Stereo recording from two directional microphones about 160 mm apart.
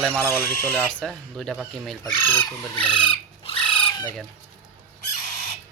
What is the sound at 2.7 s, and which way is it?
Chicken, 30° left (ahead or behind).